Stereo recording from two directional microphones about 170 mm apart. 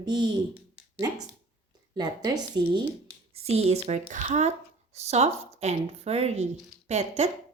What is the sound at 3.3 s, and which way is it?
Speech, 35° right (ahead or behind).